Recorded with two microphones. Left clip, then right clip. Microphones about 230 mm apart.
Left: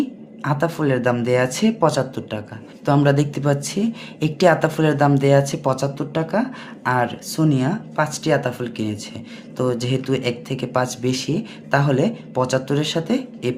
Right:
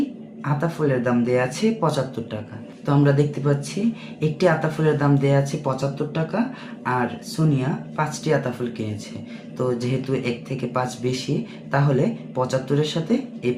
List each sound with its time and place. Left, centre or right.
0.4 s speech: left